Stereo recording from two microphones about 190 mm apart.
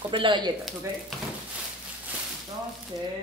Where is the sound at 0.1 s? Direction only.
25° right (ahead or behind).